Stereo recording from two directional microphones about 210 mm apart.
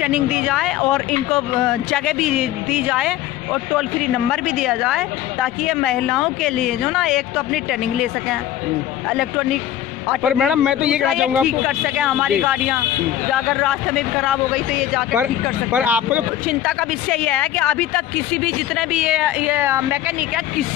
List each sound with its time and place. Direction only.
0.0 s speech: 5° right (ahead or behind)
4.3 s speech: centre (ahead or behind)
9.1 s speech: centre (ahead or behind)